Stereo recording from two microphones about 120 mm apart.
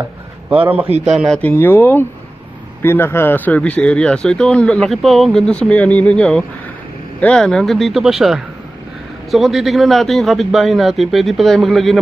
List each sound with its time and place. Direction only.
0.5 s a man's voice: 10° right (ahead or behind)
1.0 s a man's voice: centre (ahead or behind)
1.4 s a man's voice: 15° left (ahead or behind); by 12.0 s centre (ahead or behind)